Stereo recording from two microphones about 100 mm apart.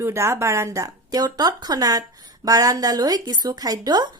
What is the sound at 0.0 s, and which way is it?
A woman's voice, 25° right (ahead or behind).